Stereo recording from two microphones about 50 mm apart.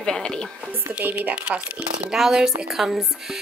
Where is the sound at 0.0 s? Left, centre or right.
Centre.